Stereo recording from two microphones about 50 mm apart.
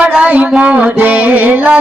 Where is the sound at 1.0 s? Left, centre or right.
Right.